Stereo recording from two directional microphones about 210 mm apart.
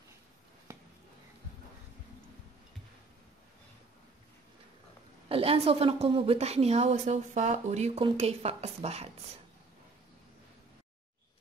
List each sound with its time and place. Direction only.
5.3 s a woman's voice: 30° right (ahead or behind)